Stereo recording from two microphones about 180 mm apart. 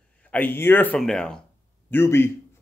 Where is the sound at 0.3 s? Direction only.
10° left (ahead or behind).